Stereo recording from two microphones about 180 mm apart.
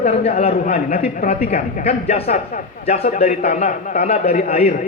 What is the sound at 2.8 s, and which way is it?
A man's voice, 35° left (ahead or behind).